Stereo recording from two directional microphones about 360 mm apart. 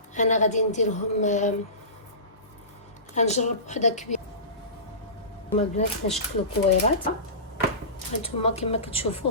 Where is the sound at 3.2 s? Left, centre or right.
Centre.